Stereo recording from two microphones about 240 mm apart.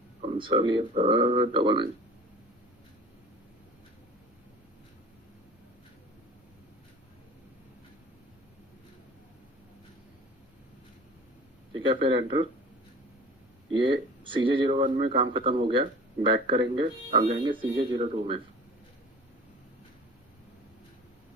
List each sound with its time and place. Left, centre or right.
0.2 s speech: right
11.9 s speech: right
13.7 s speech: centre